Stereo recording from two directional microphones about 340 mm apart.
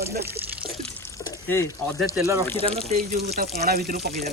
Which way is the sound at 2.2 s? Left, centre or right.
Centre.